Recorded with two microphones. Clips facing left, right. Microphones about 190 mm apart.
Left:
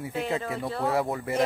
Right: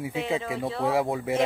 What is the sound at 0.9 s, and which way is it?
Speech, 20° right (ahead or behind).